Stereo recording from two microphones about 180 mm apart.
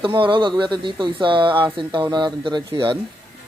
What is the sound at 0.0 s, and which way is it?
Speech, 30° right (ahead or behind).